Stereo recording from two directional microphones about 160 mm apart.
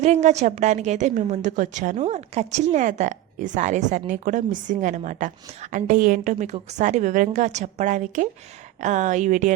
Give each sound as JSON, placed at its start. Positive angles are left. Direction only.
{"t": 0.0, "sound": "a woman's voice", "side_deg": -45}